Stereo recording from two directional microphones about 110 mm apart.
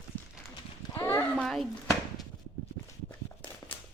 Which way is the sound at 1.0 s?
15° left (ahead or behind).